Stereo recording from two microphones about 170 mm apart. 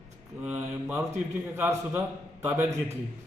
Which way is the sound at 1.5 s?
15° right (ahead or behind).